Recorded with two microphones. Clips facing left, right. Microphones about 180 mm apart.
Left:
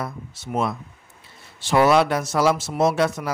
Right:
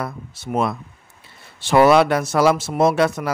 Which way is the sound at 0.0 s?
60° right (ahead or behind).